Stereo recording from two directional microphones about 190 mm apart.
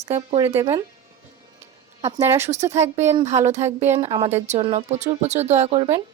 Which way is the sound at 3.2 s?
35° right (ahead or behind).